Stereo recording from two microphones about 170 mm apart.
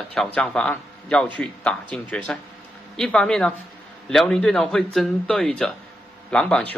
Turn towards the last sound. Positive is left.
turn(degrees=5)  # may be behind; listen again after turning